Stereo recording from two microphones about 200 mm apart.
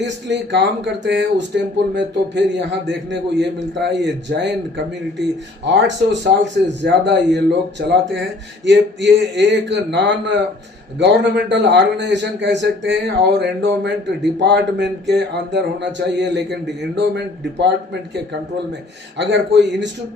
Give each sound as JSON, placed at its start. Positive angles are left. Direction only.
{"t": 0.0, "sound": "speech", "side_deg": -60}
{"t": 5.6, "sound": "speech", "side_deg": -60}
{"t": 19.1, "sound": "speech", "side_deg": -60}